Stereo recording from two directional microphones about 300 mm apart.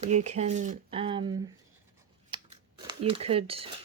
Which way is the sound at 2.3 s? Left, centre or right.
Centre.